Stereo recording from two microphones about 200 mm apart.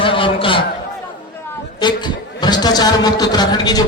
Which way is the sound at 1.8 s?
20° left (ahead or behind).